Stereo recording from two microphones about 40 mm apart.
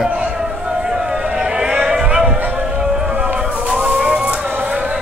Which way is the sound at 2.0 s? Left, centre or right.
Right.